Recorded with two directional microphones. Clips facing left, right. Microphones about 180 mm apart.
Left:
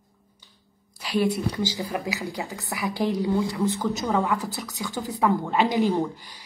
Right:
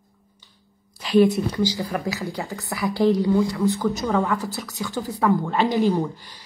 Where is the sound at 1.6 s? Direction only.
20° left (ahead or behind).